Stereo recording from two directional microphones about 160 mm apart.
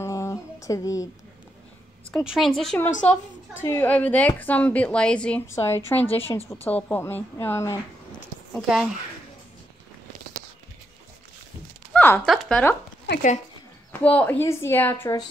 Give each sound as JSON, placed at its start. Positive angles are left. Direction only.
{"t": 0.0, "sound": "a sound", "side_deg": 20}
{"t": 2.0, "sound": "a woman's voice", "side_deg": 0}
{"t": 3.5, "sound": "a woman's voice", "side_deg": 15}
{"t": 5.5, "sound": "a woman's voice", "side_deg": 20}
{"t": 6.0, "sound": "a woman's voice", "side_deg": 40}
{"t": 6.5, "sound": "a woman's voice", "side_deg": 10}
{"t": 8.5, "sound": "a woman's voice", "side_deg": 0}
{"t": 11.9, "sound": "zipper", "side_deg": 10}
{"t": 12.3, "sound": "a woman's voice", "side_deg": 0}
{"t": 14.0, "sound": "a woman's voice", "side_deg": 10}